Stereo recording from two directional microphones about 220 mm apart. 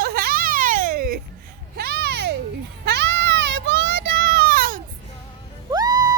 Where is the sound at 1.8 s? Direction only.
45° right (ahead or behind).